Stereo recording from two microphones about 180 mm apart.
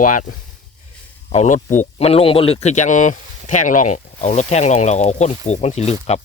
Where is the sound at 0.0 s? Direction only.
50° left (ahead or behind).